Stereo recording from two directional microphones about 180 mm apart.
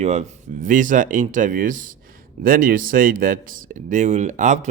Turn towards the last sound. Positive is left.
turn(degrees=-40)  # may be behind; listen again after turning